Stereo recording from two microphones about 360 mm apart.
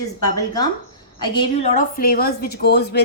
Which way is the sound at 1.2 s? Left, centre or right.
Centre.